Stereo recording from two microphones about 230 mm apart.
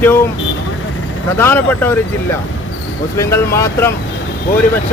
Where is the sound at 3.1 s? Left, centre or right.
Centre.